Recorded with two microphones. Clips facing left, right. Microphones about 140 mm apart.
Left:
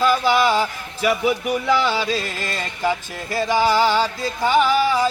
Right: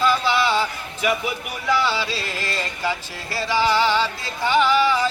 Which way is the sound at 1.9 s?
45° left (ahead or behind).